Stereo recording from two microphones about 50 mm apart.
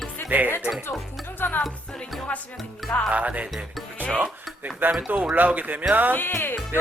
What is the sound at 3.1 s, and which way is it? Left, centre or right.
Speech, right.